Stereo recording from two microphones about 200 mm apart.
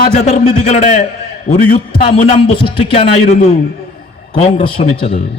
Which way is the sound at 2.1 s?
30° left (ahead or behind).